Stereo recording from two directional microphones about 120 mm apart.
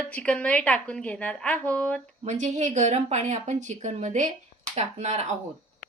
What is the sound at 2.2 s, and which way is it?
Speech, 85° right.